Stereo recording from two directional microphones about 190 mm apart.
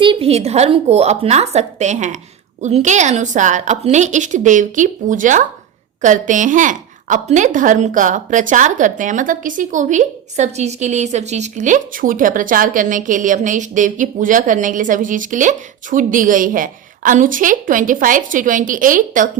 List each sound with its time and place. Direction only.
0.0 s a woman's voice: 30° right (ahead or behind); by 19.3 s 45° right (ahead or behind)